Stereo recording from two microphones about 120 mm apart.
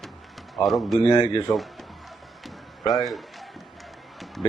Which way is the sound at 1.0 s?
35° left (ahead or behind).